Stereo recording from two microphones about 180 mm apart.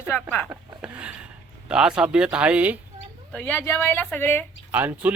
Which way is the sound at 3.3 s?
5° left (ahead or behind).